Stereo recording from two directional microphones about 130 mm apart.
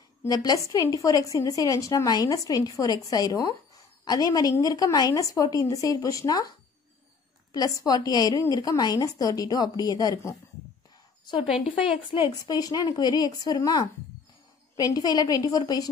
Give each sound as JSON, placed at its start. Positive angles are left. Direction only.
{"t": 0.3, "sound": "a woman's voice", "side_deg": 30}
{"t": 7.5, "sound": "a woman's voice", "side_deg": 30}
{"t": 12.1, "sound": "a woman's voice", "side_deg": 35}